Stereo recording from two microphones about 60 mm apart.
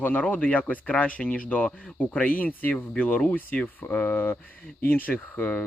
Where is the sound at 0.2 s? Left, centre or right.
Left.